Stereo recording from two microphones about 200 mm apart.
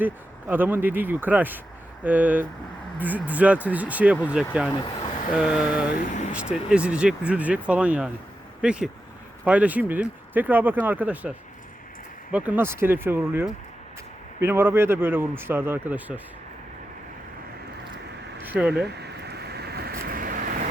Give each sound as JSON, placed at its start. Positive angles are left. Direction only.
{"t": 0.0, "sound": "speech", "side_deg": -10}
{"t": 4.7, "sound": "vehicle", "side_deg": 20}
{"t": 5.4, "sound": "speech", "side_deg": -5}
{"t": 18.4, "sound": "speech", "side_deg": -5}
{"t": 18.9, "sound": "vehicle", "side_deg": -55}